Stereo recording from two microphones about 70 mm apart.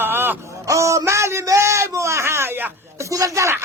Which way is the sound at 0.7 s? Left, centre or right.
Right.